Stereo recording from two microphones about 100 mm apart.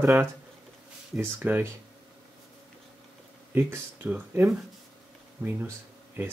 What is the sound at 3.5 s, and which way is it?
Speech, 20° right (ahead or behind).